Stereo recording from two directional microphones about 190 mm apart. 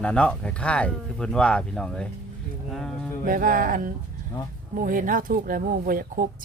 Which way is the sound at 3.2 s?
45° right (ahead or behind).